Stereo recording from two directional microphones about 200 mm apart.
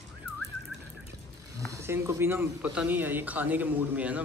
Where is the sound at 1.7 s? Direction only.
15° right (ahead or behind).